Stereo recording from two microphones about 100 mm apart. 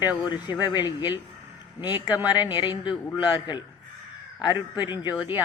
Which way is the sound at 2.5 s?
50° left (ahead or behind).